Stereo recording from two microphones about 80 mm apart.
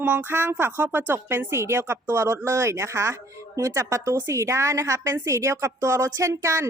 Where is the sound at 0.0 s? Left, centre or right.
Right.